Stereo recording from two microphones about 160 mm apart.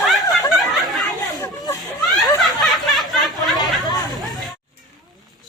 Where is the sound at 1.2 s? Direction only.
25° left (ahead or behind).